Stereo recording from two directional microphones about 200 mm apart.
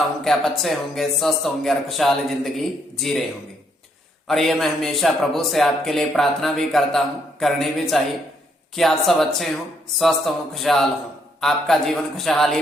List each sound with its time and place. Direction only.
0.3 s a man's voice: centre (ahead or behind)
4.3 s a man's voice: centre (ahead or behind)